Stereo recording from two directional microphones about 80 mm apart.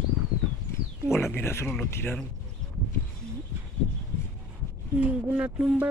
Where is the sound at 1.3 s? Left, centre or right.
Left.